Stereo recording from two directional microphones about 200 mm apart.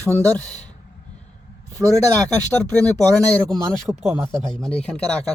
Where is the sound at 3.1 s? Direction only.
5° left (ahead or behind).